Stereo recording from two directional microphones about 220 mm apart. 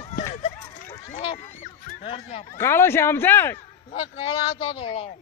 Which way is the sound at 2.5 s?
10° left (ahead or behind).